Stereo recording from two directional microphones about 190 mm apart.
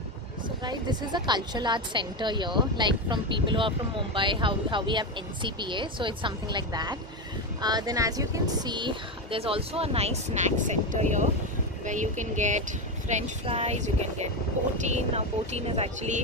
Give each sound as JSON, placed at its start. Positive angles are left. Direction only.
{"t": 0.6, "sound": "a woman's voice", "side_deg": -20}